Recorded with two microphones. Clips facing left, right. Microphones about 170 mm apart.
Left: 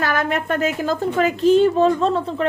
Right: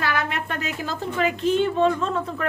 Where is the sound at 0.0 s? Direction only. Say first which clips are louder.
Left 5 dB; 45° left (ahead or behind).